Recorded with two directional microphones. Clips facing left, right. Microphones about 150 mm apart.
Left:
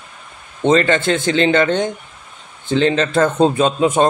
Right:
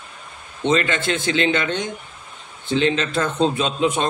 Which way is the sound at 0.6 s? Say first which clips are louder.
Left 5 dB; 50° left (ahead or behind).